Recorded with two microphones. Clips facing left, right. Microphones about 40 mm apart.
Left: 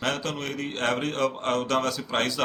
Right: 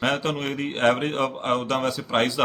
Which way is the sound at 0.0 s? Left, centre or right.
Right.